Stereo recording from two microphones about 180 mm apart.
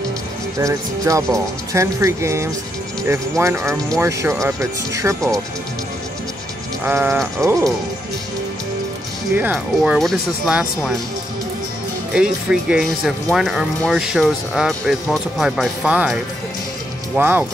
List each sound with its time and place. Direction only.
0.6 s speech: 15° right (ahead or behind)
6.8 s speech: 10° right (ahead or behind)
9.3 s speech: 10° right (ahead or behind)
12.1 s speech: 5° right (ahead or behind)